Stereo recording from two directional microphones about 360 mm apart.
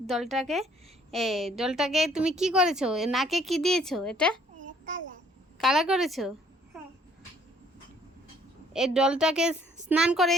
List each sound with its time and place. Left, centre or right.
0.1 s a woman's voice: centre
4.6 s child singing: right
5.5 s a woman's voice: centre
8.7 s a woman's voice: centre